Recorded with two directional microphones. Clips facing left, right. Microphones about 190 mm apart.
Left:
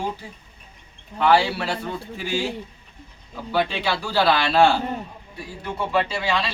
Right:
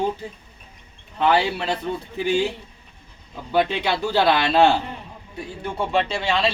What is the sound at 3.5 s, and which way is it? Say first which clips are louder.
Speech: right 2 dB; 20° right (ahead or behind).